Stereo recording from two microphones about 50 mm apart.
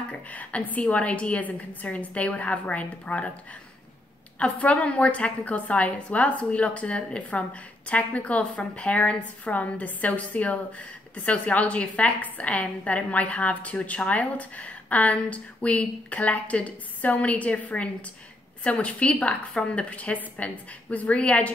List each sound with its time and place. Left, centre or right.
0.3 s a woman's voice: left
4.4 s a woman's voice: left